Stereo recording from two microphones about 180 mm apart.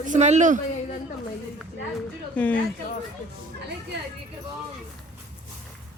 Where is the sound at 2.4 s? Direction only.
5° left (ahead or behind).